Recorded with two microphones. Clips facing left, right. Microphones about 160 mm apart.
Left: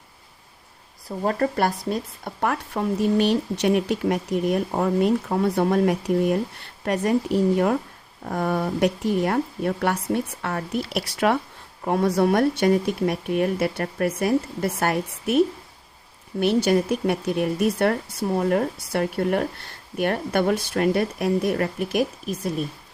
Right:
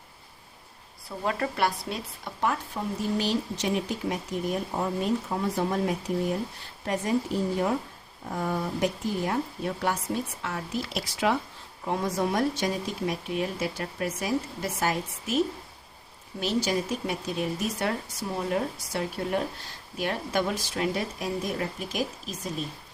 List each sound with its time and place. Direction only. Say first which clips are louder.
1.0 s speech: left 6 dB; 45° left (ahead or behind); by 15.4 s 60° left (ahead or behind)
16.4 s speech: left 8 dB; 60° left (ahead or behind)